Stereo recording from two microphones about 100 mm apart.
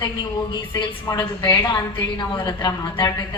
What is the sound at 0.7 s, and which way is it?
A woman's voice, 40° left (ahead or behind).